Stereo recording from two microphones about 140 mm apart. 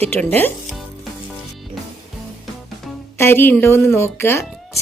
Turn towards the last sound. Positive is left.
turn(degrees=15)  # may be behind; listen again after turning